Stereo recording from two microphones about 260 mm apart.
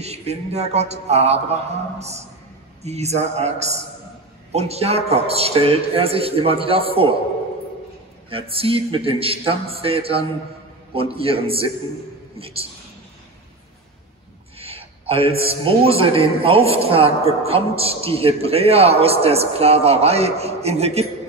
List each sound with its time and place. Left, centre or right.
0.0 s a man's voice: right
8.3 s a man's voice: right
14.6 s a man's voice: right